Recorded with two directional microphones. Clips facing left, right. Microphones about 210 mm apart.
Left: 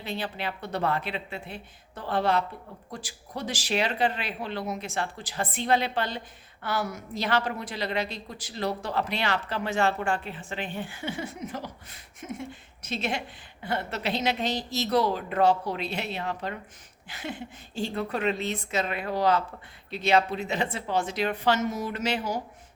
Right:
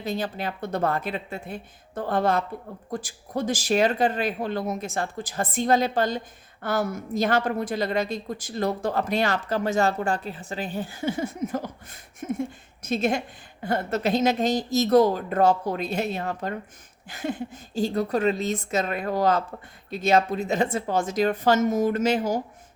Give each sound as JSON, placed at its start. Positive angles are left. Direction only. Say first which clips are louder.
{"t": 0.0, "sound": "speech", "louder": "right 4 dB", "side_deg": -45}